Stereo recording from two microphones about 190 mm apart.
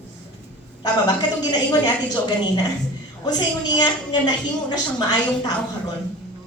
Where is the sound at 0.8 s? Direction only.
20° left (ahead or behind).